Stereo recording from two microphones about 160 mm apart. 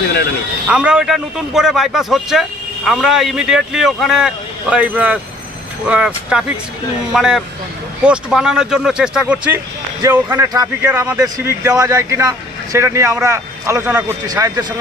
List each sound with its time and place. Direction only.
0.7 s a man's voice: 5° right (ahead or behind)
10.5 s speech: 25° right (ahead or behind)